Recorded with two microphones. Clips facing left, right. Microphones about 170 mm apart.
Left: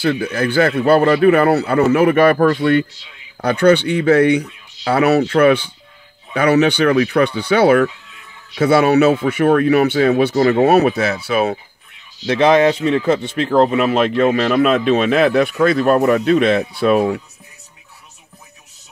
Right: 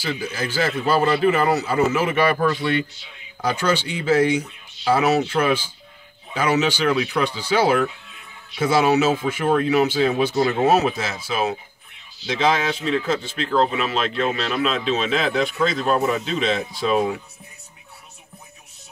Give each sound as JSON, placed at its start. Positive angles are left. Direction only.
{"t": 0.0, "sound": "speech", "side_deg": 60}